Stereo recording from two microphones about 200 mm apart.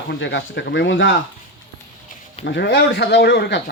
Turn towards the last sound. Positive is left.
turn(degrees=55)  # may be behind; listen again after turning